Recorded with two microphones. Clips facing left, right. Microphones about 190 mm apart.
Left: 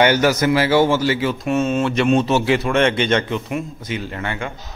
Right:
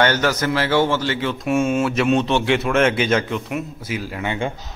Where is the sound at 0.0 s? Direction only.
10° left (ahead or behind).